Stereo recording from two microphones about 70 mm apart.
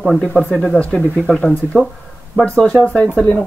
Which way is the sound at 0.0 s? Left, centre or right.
Centre.